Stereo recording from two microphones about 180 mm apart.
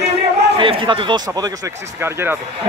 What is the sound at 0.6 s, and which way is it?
Speech, 30° right (ahead or behind).